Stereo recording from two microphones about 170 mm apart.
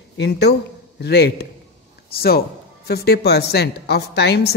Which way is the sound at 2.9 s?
70° left (ahead or behind).